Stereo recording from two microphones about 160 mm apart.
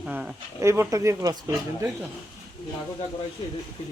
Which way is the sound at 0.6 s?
20° right (ahead or behind).